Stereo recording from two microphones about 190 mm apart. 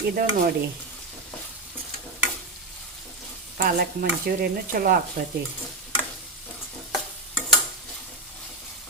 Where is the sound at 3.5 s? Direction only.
50° right (ahead or behind).